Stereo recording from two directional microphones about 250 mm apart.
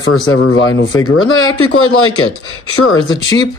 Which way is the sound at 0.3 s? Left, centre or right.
Left.